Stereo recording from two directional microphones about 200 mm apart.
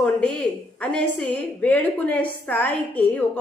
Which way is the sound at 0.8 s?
5° left (ahead or behind).